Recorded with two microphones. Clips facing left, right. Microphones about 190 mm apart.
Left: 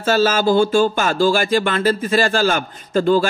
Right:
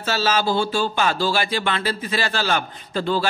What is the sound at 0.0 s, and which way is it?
Speech, 50° left (ahead or behind).